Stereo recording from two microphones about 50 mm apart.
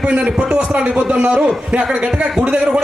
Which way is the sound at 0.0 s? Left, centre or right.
Right.